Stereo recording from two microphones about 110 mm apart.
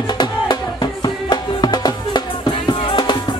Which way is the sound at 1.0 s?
40° left (ahead or behind).